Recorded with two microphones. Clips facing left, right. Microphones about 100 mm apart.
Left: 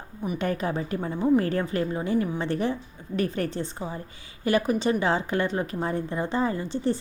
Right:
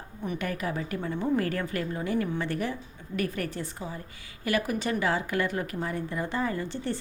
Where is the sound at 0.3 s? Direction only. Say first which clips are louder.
Left 5 dB; 30° left (ahead or behind).